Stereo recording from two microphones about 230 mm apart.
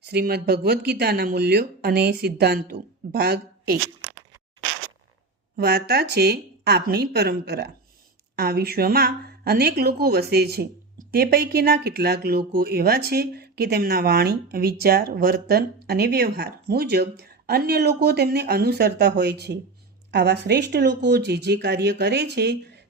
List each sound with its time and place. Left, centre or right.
0.0 s a woman's voice: right
5.5 s a woman's voice: right